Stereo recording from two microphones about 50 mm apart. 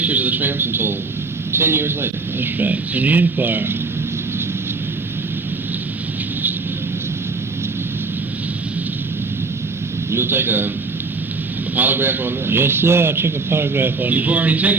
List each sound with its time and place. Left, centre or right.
0.0 s a man's voice: right
10.1 s a man's voice: right
11.8 s a man's voice: right